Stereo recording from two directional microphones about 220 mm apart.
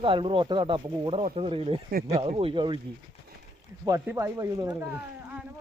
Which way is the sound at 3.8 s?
15° right (ahead or behind).